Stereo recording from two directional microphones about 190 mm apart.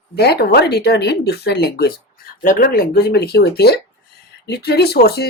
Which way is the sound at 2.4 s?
45° left (ahead or behind).